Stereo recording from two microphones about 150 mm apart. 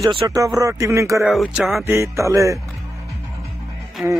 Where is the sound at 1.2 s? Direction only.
Centre (ahead or behind).